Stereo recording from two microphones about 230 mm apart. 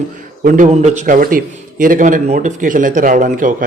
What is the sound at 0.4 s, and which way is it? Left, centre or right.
A man's voice, right.